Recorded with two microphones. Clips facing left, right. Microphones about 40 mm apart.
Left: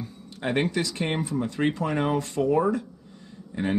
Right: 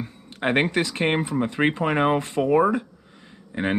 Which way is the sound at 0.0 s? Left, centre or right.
Right.